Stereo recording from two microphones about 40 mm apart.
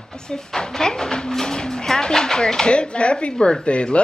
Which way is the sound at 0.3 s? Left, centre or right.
Centre.